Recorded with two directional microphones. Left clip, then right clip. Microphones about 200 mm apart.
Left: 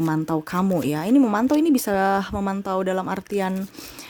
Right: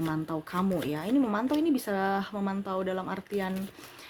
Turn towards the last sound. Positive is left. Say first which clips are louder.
# left 8 dB
turn(degrees=55)  # may be behind; listen again after turning